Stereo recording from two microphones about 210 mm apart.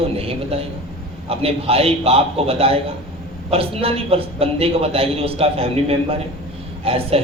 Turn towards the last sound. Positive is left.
turn(degrees=-25)  # may be behind; listen again after turning